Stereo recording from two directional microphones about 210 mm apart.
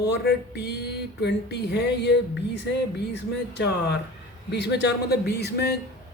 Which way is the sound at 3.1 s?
55° left (ahead or behind).